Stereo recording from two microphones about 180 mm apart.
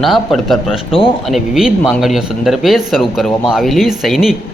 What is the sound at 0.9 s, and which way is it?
Speech, 30° left (ahead or behind).